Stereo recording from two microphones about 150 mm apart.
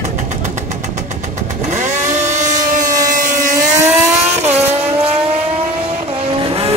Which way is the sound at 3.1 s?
60° right (ahead or behind).